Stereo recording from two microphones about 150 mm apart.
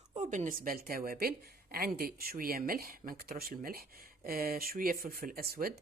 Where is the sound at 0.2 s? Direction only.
55° right (ahead or behind).